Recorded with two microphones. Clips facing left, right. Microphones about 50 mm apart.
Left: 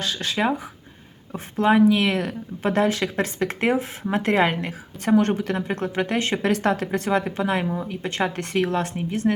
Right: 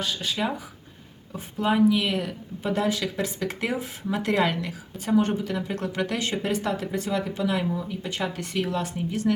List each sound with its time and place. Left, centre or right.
0.0 s speech: left
1.5 s speech: left
5.0 s speech: left
5.9 s speech: left
6.1 s speech: left
6.4 s speech: left